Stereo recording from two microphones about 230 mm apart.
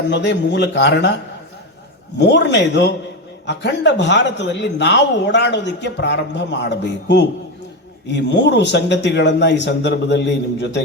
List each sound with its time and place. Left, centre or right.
0.1 s a man's voice: left